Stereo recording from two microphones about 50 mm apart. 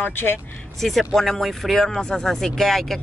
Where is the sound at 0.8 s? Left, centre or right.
Centre.